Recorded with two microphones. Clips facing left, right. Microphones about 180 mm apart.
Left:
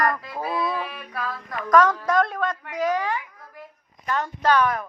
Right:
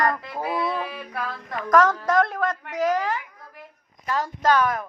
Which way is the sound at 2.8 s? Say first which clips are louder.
Right 1 dB; 40° right (ahead or behind).